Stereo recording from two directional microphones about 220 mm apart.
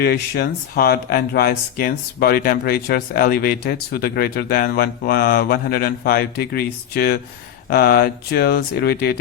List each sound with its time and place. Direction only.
0.0 s speech: 45° left (ahead or behind)